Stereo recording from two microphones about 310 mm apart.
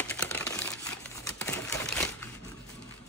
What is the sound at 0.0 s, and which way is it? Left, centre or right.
Typewriter, centre.